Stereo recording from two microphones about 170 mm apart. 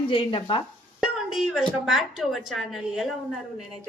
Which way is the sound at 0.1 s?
30° left (ahead or behind).